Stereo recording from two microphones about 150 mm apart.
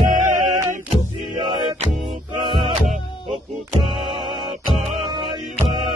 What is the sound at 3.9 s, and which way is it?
Mantra, 35° right (ahead or behind).